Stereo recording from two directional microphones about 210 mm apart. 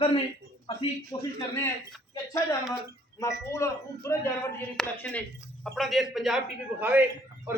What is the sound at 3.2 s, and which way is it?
A man's voice, 15° left (ahead or behind).